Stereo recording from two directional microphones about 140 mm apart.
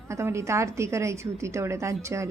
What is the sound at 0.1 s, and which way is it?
A woman's voice, 20° right (ahead or behind).